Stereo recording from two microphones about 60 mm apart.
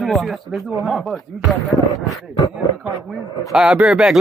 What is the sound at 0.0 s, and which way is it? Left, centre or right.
Speech, centre.